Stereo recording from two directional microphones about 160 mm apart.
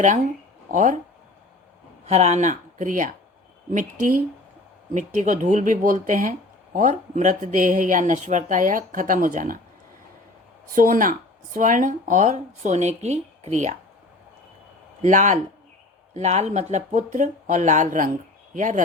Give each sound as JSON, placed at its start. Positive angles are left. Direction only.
{"t": 0.7, "sound": "speech", "side_deg": -55}
{"t": 2.0, "sound": "speech", "side_deg": -45}
{"t": 10.8, "sound": "speech", "side_deg": -55}
{"t": 15.0, "sound": "speech", "side_deg": -50}